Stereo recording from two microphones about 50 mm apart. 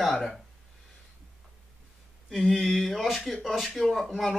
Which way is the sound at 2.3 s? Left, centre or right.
Centre.